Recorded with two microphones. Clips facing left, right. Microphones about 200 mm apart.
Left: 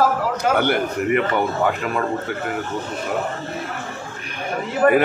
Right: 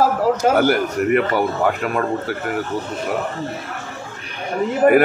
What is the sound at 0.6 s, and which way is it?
Speech, 45° right (ahead or behind).